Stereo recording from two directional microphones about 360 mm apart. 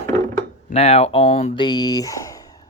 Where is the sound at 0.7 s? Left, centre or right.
Centre.